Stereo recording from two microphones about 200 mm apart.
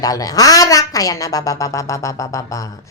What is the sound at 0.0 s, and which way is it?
Speech, 20° left (ahead or behind).